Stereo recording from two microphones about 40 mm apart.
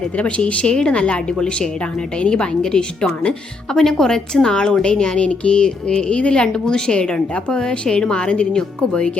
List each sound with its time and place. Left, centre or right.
0.2 s a woman's voice: left